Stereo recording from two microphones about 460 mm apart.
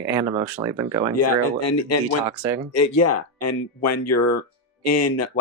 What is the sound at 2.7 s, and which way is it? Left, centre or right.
Speech, left.